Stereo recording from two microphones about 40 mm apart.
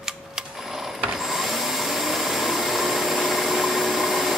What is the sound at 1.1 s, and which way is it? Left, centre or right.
Vacuum cleaner, centre.